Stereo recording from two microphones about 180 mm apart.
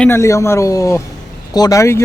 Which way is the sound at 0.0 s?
15° left (ahead or behind).